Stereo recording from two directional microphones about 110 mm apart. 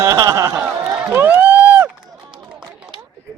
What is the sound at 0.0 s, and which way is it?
Speech, 30° right (ahead or behind).